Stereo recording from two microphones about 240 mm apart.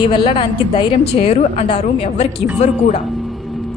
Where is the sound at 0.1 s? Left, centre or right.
Left.